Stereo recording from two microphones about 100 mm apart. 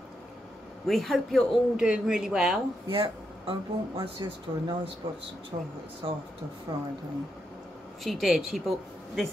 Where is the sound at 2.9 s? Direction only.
60° right (ahead or behind).